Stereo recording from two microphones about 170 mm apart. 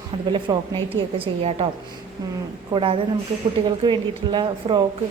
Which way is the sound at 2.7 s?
30° right (ahead or behind).